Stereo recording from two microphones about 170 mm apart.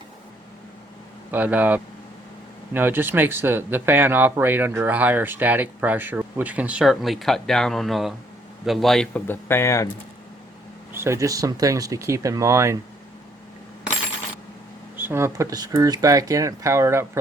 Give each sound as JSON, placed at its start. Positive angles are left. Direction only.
{"t": 1.3, "sound": "speech", "side_deg": -10}
{"t": 10.9, "sound": "speech", "side_deg": -15}
{"t": 14.9, "sound": "speech", "side_deg": -15}